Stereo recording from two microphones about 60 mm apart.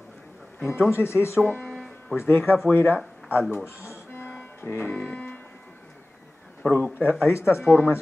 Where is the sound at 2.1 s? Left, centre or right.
Left.